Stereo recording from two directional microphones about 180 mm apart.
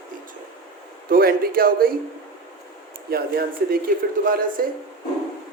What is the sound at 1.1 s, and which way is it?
Speech, 55° right (ahead or behind).